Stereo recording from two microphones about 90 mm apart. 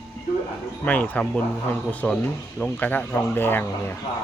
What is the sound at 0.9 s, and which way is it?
Speech, 15° left (ahead or behind).